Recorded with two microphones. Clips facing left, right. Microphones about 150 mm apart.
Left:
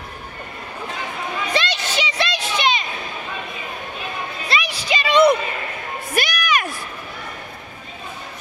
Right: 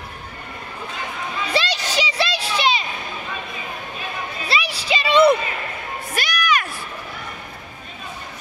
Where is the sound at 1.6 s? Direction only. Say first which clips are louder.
Right 1 dB; 35° right (ahead or behind).